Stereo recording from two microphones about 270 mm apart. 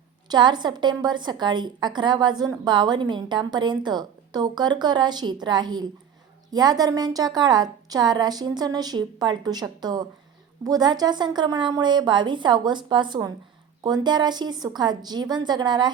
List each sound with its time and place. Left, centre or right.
0.3 s a woman's voice: centre